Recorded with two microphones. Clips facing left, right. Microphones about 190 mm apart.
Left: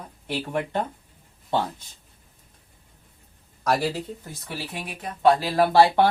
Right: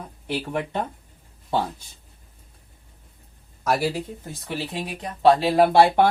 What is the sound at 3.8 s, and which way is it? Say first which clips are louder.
Speech: right 2 dB; 10° right (ahead or behind).